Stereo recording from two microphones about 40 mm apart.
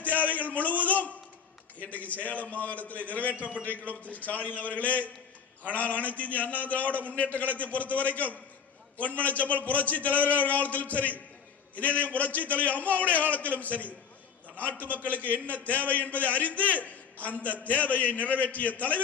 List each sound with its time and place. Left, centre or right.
0.0 s a man's voice: left